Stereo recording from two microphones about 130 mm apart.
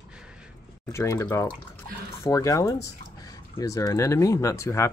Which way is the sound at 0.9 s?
25° left (ahead or behind).